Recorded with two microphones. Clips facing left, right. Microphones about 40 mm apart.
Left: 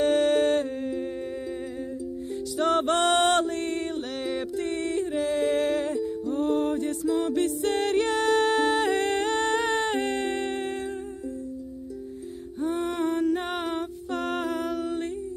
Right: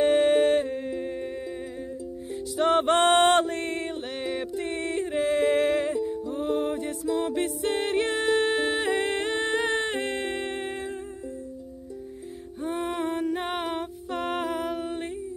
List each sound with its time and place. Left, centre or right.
0.0 s music: centre
2.6 s music: right
3.9 s music: centre
4.7 s music: right
6.2 s music: centre
12.9 s music: centre